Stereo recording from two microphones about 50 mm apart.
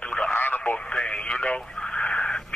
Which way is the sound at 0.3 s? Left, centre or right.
Left.